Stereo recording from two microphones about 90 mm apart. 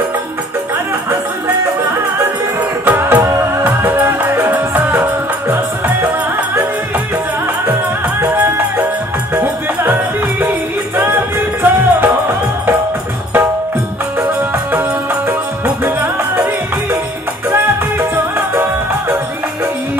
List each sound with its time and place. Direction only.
2.8 s music: 20° right (ahead or behind)
8.2 s music: 20° right (ahead or behind)
11.0 s music: 25° right (ahead or behind)
15.2 s music: 20° right (ahead or behind)
18.1 s music: 25° right (ahead or behind)